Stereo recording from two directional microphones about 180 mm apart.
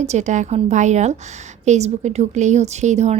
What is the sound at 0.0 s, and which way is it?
A woman's voice, 40° right (ahead or behind).